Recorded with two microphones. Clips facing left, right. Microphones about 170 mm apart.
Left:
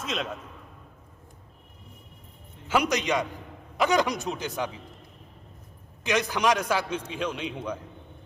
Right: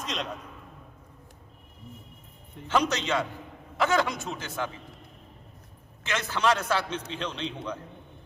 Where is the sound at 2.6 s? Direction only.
10° left (ahead or behind).